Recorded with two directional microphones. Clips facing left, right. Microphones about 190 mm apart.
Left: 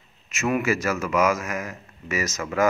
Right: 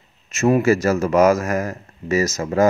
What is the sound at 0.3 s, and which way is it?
A man's voice, 40° right (ahead or behind).